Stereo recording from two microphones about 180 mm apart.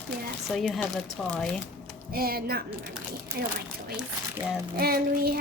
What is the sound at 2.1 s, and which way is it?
Speech, 55° right (ahead or behind).